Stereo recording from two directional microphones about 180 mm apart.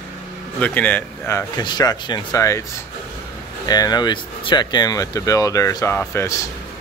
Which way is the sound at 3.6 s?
20° left (ahead or behind).